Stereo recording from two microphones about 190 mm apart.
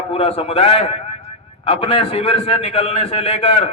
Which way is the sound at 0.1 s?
30° left (ahead or behind).